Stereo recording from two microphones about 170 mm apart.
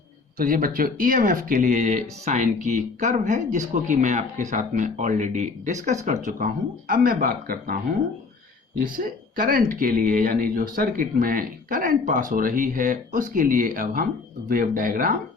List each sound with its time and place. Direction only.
0.3 s speech: 55° right (ahead or behind)
8.8 s speech: 55° right (ahead or behind)